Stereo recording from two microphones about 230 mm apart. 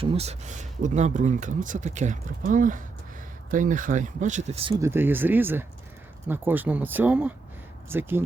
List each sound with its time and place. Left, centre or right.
0.0 s speech: right
4.8 s speech: centre